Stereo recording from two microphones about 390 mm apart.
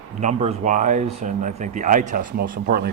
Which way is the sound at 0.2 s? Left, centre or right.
Centre.